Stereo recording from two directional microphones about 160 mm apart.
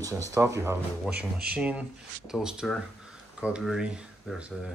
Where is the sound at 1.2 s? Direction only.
70° right (ahead or behind).